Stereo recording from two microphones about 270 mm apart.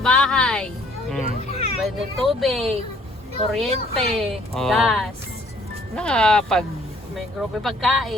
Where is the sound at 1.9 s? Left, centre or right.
Centre.